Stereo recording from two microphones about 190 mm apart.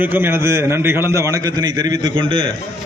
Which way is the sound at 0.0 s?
10° right (ahead or behind).